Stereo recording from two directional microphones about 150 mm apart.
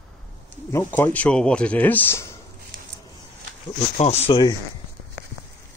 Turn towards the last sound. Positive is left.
turn(degrees=45)  # may be behind; listen again after turning